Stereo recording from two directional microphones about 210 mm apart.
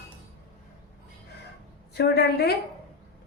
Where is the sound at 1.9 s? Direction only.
50° left (ahead or behind).